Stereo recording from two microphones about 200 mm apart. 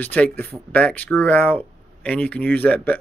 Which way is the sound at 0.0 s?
10° left (ahead or behind).